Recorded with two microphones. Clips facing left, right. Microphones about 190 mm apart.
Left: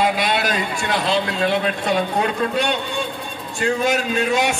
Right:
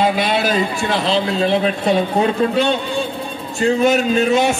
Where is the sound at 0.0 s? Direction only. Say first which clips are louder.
Right 3 dB; 25° right (ahead or behind).